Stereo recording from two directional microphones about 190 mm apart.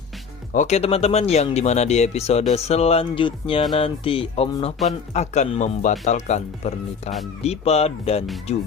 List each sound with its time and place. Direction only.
0.5 s speech: 40° left (ahead or behind)